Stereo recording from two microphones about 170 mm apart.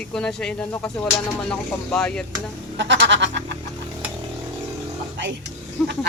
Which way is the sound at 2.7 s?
90° right.